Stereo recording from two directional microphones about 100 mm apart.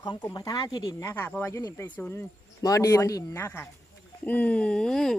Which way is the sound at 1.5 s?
30° left (ahead or behind).